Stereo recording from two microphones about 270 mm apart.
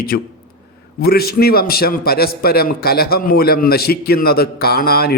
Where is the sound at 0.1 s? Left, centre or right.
Left.